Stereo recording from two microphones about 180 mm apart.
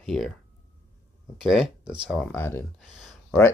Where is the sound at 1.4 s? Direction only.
Centre (ahead or behind).